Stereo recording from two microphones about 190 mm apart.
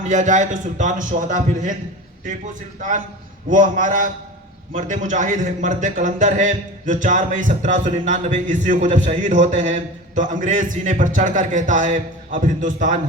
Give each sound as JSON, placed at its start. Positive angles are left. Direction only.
{"t": 0.1, "sound": "a man's voice", "side_deg": -40}